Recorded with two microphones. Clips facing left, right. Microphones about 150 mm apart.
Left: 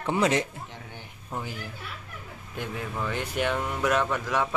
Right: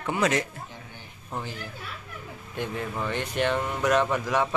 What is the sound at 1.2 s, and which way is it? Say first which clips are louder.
Speech: even; 5° left (ahead or behind).